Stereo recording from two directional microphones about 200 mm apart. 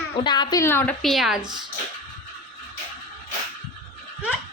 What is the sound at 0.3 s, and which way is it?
A woman's voice, 20° left (ahead or behind).